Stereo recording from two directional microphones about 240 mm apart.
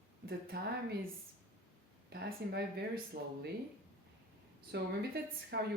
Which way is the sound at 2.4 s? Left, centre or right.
Right.